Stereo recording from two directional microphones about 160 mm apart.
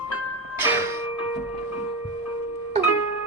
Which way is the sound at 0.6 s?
15° right (ahead or behind).